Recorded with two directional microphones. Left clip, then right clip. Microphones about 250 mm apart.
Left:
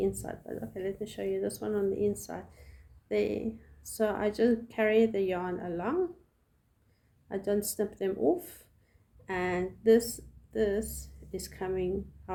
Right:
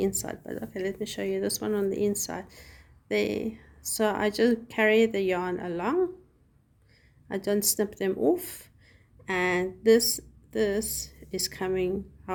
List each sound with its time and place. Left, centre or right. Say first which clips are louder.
0.0 s speech: right 3 dB; right
7.3 s a woman's voice: right 4 dB; right